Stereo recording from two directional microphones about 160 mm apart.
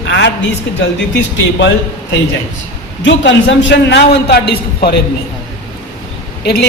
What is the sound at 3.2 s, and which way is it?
A woman's voice, 90° left.